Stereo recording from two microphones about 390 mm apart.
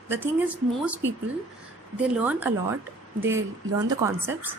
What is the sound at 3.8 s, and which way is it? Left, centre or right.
Speech, centre.